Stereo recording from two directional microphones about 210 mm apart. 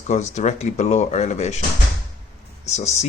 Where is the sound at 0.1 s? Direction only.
35° left (ahead or behind).